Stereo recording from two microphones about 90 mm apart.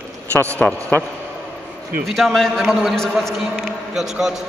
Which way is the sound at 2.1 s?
Centre (ahead or behind).